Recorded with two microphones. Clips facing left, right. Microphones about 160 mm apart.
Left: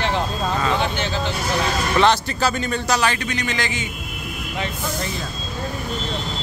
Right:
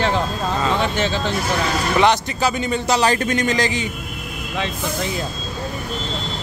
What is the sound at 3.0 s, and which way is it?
Speech, 40° right (ahead or behind).